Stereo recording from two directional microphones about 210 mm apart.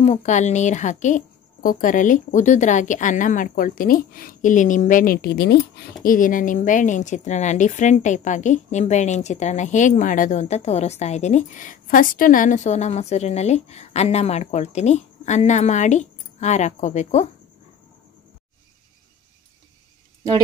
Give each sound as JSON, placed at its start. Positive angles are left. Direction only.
{"t": 0.0, "sound": "a woman's voice", "side_deg": 35}
{"t": 6.0, "sound": "a woman's voice", "side_deg": 40}